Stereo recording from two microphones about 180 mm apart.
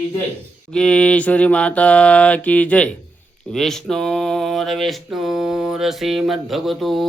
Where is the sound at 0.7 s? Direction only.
5° left (ahead or behind).